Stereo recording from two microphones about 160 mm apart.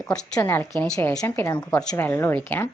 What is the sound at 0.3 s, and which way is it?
A woman's voice, 20° left (ahead or behind).